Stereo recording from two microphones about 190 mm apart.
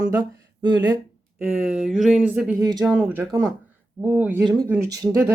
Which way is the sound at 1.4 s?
5° right (ahead or behind).